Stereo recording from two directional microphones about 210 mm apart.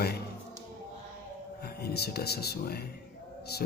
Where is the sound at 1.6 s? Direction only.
50° left (ahead or behind).